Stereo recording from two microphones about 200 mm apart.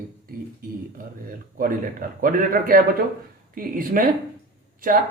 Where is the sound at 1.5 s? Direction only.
45° right (ahead or behind).